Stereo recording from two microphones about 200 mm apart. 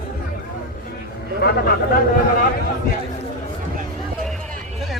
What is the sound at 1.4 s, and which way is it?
Speech, 50° left (ahead or behind).